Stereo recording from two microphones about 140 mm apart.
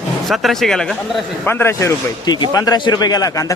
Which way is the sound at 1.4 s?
15° left (ahead or behind).